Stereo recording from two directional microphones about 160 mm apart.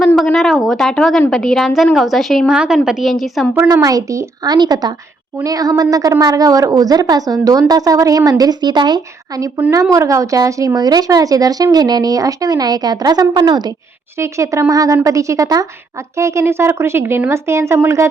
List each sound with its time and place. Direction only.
0.2 s a woman's voice: centre (ahead or behind)
3.7 s a woman's voice: 20° right (ahead or behind)
9.6 s a woman's voice: 15° right (ahead or behind)